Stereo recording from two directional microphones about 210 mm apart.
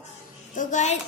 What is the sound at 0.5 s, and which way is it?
Speech, 35° left (ahead or behind).